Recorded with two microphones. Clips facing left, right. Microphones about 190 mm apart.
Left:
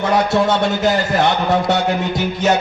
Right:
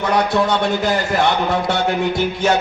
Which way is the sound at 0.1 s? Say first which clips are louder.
Left 1 dB; 25° left (ahead or behind).